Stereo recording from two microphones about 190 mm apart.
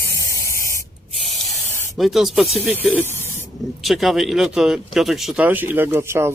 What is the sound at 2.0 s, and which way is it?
Speech, centre (ahead or behind).